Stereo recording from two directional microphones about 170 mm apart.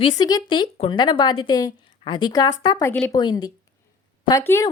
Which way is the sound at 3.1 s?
25° left (ahead or behind).